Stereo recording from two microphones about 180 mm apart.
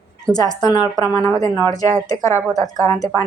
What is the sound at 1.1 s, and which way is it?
Speech, 5° left (ahead or behind).